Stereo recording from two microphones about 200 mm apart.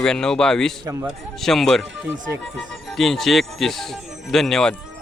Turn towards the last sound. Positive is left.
turn(degrees=0)  # may be behind; listen again after turning